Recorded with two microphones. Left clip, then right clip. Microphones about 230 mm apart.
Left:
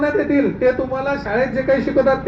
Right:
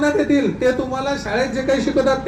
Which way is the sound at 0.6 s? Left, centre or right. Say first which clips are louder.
Left 1 dB; right.